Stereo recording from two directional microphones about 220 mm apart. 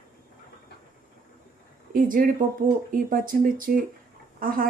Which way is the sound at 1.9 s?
40° right (ahead or behind).